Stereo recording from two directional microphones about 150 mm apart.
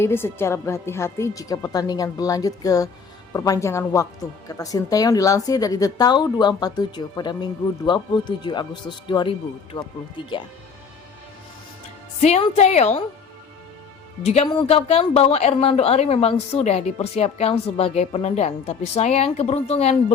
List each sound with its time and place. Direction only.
0.0 s speech: 15° left (ahead or behind); by 10.4 s 30° left (ahead or behind)
12.2 s speech: 45° left (ahead or behind)
14.3 s speech: 45° left (ahead or behind)